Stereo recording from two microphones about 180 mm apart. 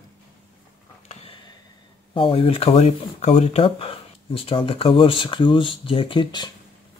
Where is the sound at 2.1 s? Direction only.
30° left (ahead or behind).